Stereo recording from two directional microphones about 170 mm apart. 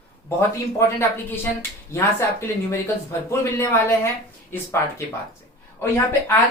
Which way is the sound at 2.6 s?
15° left (ahead or behind).